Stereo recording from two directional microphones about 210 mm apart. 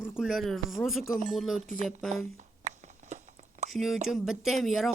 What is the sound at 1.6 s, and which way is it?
Speech, 35° right (ahead or behind).